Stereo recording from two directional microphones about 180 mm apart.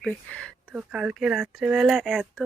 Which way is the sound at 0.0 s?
5° left (ahead or behind).